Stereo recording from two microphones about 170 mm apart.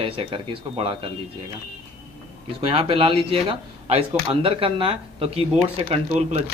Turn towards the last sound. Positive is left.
turn(degrees=-40)  # may be behind; listen again after turning